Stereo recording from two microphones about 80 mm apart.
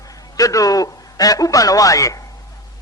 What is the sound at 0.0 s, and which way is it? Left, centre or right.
A man's voice, left.